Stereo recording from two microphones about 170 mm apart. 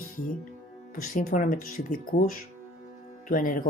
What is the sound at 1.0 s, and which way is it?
Speech, 50° left (ahead or behind).